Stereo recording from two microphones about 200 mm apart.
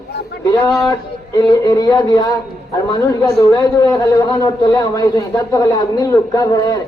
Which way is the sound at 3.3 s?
20° left (ahead or behind).